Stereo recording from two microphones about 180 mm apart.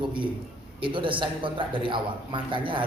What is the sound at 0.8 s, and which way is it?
Speech, 30° right (ahead or behind).